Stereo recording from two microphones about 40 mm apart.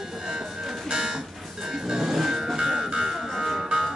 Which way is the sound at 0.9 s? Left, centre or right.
Centre.